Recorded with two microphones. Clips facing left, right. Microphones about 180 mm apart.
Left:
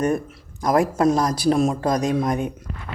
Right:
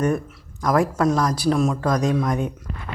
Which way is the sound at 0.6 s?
15° left (ahead or behind).